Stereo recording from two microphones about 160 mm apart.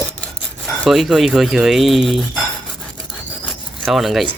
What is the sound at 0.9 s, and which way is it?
Speech, centre (ahead or behind).